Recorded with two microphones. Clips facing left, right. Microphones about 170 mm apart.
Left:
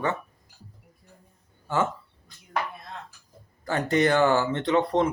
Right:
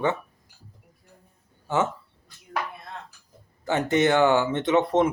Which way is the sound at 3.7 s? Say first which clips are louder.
Right 1 dB; 20° right (ahead or behind).